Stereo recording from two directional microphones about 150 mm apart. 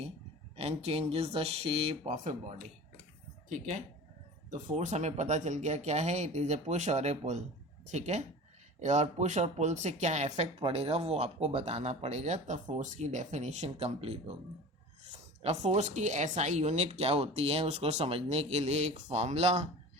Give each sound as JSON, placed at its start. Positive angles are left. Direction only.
{"t": 0.5, "sound": "speech", "side_deg": -40}
{"t": 15.4, "sound": "speech", "side_deg": -45}